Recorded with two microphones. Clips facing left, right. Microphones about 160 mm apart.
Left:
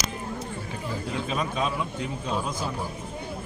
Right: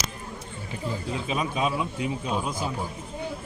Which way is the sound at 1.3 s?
10° right (ahead or behind).